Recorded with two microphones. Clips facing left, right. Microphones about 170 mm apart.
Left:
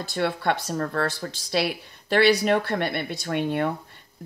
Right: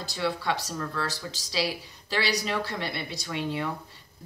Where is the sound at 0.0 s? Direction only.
55° left (ahead or behind).